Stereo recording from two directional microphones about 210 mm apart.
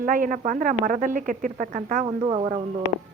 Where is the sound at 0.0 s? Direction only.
40° right (ahead or behind).